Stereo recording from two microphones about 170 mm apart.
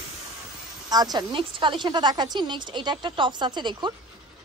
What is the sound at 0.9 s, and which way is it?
Speech, 25° right (ahead or behind).